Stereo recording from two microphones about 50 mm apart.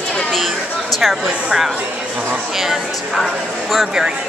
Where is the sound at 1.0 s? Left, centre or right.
Centre.